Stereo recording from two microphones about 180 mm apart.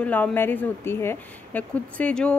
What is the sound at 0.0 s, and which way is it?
Speech, 10° left (ahead or behind).